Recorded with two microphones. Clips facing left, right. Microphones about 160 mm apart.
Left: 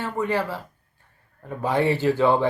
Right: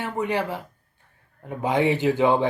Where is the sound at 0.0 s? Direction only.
20° right (ahead or behind).